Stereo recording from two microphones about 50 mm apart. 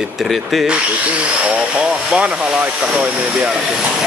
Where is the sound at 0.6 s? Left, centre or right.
Right.